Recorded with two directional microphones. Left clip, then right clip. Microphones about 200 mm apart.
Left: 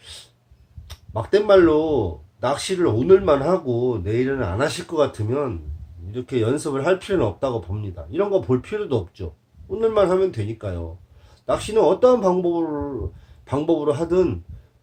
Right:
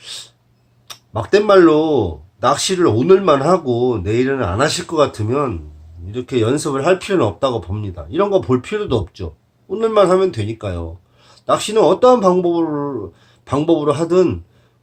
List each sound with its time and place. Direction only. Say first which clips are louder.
0.9 s speech: right 5 dB; 20° right (ahead or behind)